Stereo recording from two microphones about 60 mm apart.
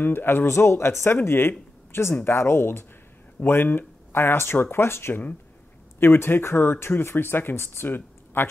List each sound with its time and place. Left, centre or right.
0.0 s a woman's voice: left